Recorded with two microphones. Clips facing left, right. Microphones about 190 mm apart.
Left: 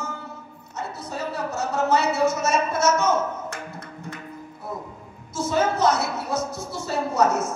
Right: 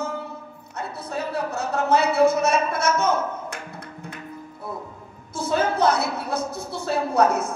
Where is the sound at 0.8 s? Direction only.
60° right (ahead or behind).